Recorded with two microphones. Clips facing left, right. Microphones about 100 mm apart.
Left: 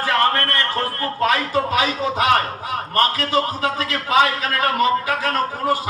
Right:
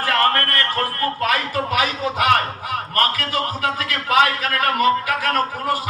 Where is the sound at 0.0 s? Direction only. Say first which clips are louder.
Even; 20° left (ahead or behind).